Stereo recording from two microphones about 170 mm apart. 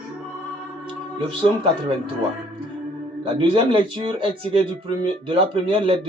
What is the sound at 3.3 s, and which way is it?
A man's voice, 30° right (ahead or behind).